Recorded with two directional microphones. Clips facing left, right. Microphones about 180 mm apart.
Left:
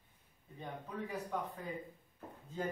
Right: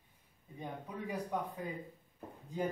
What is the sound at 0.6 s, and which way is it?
Speech, 15° right (ahead or behind).